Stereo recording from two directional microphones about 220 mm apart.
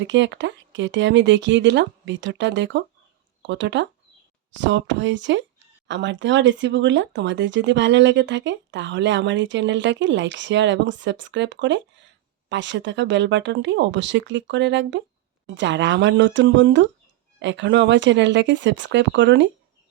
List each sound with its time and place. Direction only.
0.0 s speech: 55° right (ahead or behind)